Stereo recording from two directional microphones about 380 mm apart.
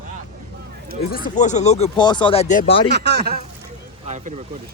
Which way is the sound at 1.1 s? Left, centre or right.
Left.